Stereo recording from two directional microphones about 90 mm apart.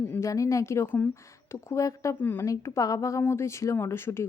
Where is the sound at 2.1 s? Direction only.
20° left (ahead or behind).